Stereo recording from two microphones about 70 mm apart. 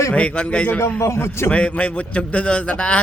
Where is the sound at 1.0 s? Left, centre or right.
Left.